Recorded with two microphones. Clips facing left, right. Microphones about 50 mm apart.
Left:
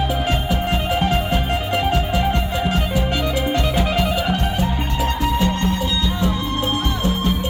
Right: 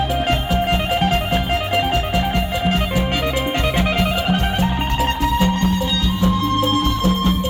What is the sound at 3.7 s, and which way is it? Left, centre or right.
Music, right.